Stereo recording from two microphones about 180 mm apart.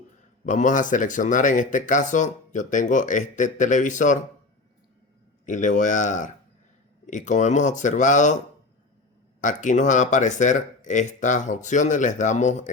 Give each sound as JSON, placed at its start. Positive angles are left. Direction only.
{"t": 0.4, "sound": "speech", "side_deg": 45}
{"t": 5.5, "sound": "speech", "side_deg": 45}
{"t": 9.4, "sound": "speech", "side_deg": 45}